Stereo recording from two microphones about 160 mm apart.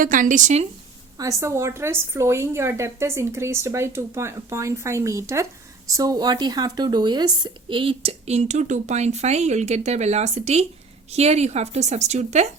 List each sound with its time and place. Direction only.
0.0 s speech: 55° right (ahead or behind)
1.2 s a woman's voice: 20° right (ahead or behind); by 12.5 s 45° right (ahead or behind)